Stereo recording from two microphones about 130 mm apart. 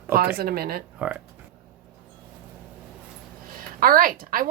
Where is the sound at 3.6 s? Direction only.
90° right.